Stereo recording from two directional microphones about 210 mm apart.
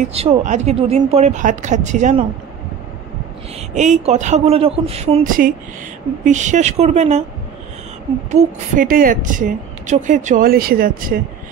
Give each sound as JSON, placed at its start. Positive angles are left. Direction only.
{"t": 0.1, "sound": "a woman's voice", "side_deg": -30}
{"t": 3.7, "sound": "a woman's voice", "side_deg": -35}
{"t": 8.3, "sound": "a woman's voice", "side_deg": -35}